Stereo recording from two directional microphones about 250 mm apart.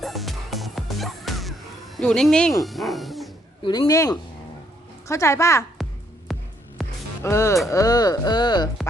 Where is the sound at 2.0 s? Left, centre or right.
Centre.